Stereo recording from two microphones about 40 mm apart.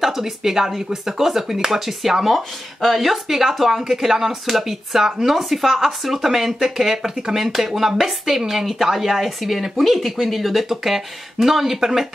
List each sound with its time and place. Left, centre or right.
0.0 s speech: centre